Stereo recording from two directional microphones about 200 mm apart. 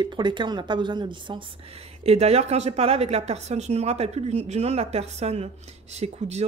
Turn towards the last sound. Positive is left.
turn(degrees=-30)  # may be behind; listen again after turning